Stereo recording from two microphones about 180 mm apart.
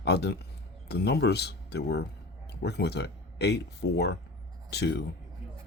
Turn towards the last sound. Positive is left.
turn(degrees=65)  # may be behind; listen again after turning